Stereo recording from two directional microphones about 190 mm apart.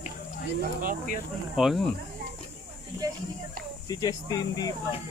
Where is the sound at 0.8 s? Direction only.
45° right (ahead or behind).